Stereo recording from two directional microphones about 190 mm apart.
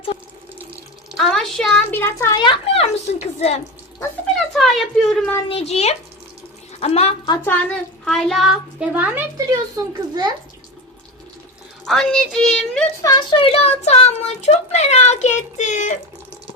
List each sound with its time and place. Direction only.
1.1 s a child's voice: centre (ahead or behind); by 3.6 s 35° left (ahead or behind)
4.4 s a woman's voice: centre (ahead or behind)
5.5 s a child's voice: 35° left (ahead or behind)
7.4 s a woman's voice: 10° left (ahead or behind); by 9.2 s 5° right (ahead or behind)
9.5 s a child's voice: 20° right (ahead or behind)
11.9 s a woman's voice: centre (ahead or behind)
13.0 s a child's voice: 20° left (ahead or behind); by 16.0 s 40° left (ahead or behind)